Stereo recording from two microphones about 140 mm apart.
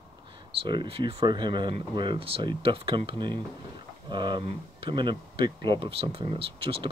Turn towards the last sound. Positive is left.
turn(degrees=-40)  # may be behind; listen again after turning